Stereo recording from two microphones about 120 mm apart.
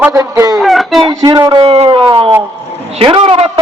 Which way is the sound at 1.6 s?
60° right (ahead or behind).